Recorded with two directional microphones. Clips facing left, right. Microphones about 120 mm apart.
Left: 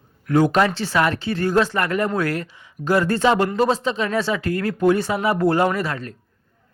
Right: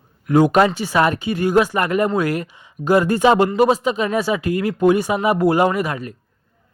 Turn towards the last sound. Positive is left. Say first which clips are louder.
# right 3 dB
turn(degrees=-10)  # may be behind; listen again after turning